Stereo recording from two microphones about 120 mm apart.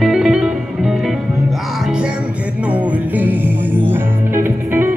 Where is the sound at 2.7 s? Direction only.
15° right (ahead or behind).